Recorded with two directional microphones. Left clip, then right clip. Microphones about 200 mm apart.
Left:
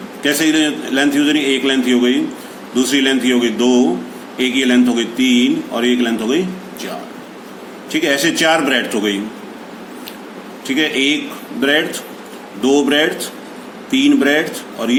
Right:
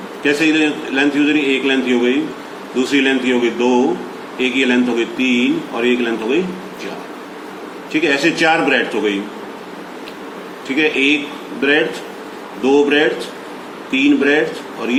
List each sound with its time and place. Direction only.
0.2 s a man's voice: 60° left (ahead or behind)
8.0 s a man's voice: 60° left (ahead or behind)
10.8 s a man's voice: 60° left (ahead or behind)
12.6 s a man's voice: 60° left (ahead or behind)